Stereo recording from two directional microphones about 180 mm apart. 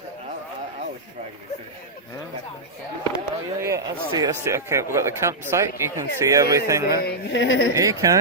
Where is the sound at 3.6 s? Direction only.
15° right (ahead or behind).